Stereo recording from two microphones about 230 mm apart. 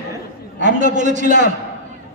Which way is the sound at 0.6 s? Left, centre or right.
Right.